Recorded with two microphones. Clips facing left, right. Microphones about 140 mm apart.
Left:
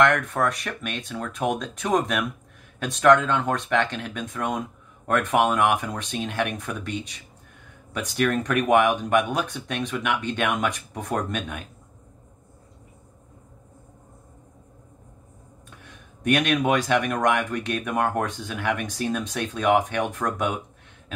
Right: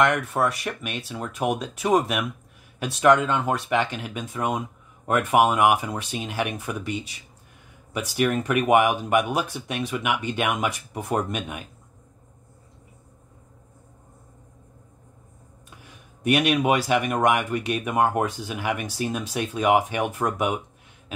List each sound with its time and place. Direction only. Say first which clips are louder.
0.0 s speech: left 1 dB; 5° right (ahead or behind)
15.8 s speech: right 1 dB; 5° right (ahead or behind)